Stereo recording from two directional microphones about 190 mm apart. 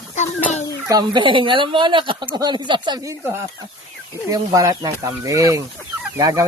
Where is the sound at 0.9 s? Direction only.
25° right (ahead or behind).